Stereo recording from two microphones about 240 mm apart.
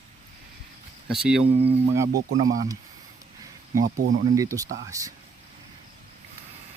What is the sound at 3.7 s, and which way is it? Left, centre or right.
Speech, right.